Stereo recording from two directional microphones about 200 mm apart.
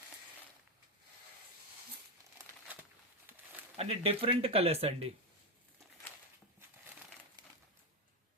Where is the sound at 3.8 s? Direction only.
30° right (ahead or behind).